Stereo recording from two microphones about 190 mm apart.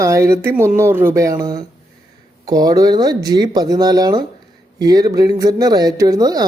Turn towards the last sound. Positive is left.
turn(degrees=-20)  # may be behind; listen again after turning